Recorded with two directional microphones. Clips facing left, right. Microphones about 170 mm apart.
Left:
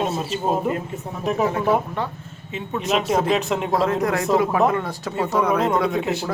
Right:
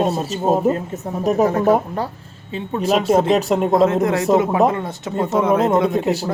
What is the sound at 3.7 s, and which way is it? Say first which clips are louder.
Speech: right 5 dB; 25° right (ahead or behind).